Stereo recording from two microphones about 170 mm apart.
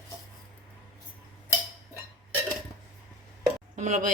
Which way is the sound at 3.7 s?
45° right (ahead or behind).